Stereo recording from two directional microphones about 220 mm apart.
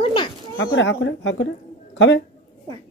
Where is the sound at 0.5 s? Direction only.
55° left (ahead or behind).